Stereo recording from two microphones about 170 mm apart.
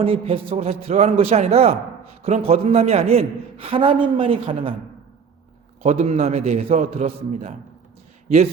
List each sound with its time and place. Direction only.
0.0 s a man's voice: 35° right (ahead or behind)
5.8 s a man's voice: 40° right (ahead or behind)